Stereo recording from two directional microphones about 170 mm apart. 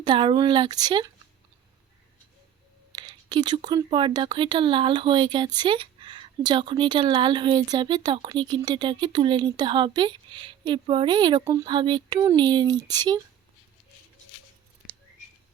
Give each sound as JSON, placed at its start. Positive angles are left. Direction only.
{"t": 0.0, "sound": "a woman's voice", "side_deg": -30}
{"t": 2.9, "sound": "a woman's voice", "side_deg": -25}